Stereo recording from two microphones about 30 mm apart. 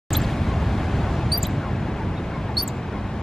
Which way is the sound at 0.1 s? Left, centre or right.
Centre.